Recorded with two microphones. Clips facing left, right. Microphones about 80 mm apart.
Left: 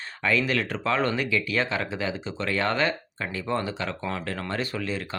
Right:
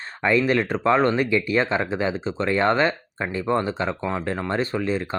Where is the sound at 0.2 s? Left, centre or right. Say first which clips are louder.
Right 5 dB; right.